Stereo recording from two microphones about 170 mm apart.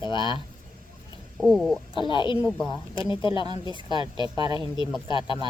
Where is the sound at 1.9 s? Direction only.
30° left (ahead or behind).